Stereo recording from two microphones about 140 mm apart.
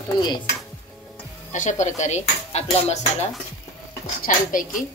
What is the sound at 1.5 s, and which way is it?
Dishes, 60° left (ahead or behind).